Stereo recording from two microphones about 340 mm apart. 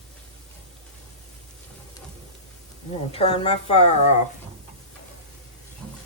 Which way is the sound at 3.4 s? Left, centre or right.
Centre.